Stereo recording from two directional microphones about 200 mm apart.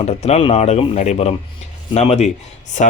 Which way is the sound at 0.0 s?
30° left (ahead or behind).